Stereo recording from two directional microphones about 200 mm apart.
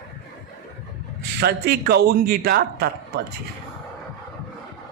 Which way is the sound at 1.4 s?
50° right (ahead or behind).